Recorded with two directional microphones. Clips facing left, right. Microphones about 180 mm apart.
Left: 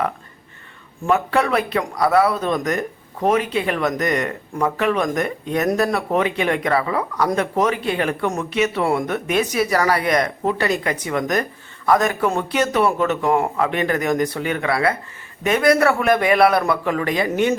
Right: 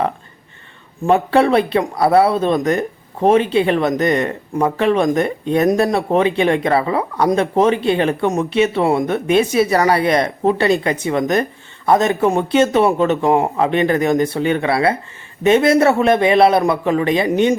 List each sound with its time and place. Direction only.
1.0 s speech: 30° right (ahead or behind)